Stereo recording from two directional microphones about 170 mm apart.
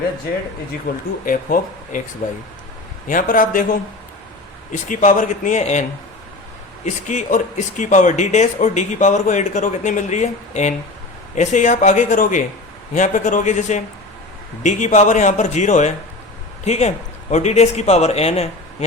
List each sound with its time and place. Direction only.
0.9 s speech: 50° left (ahead or behind)
6.8 s a man's voice: 45° left (ahead or behind)